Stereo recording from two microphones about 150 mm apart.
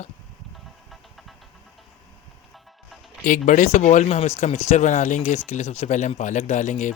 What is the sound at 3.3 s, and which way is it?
Speech, 60° left (ahead or behind).